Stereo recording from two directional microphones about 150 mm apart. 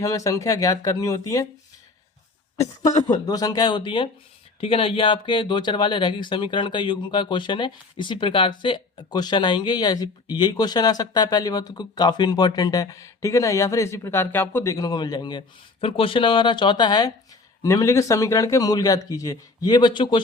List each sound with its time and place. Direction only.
0.0 s speech: 20° left (ahead or behind)
3.0 s speech: 25° left (ahead or behind)